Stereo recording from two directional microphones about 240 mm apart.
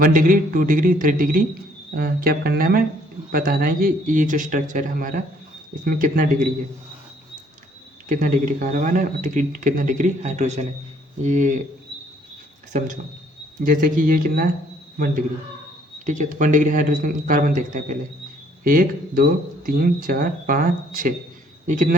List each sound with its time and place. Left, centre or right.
0.0 s speech: right
8.1 s speech: right
13.7 s a man's voice: right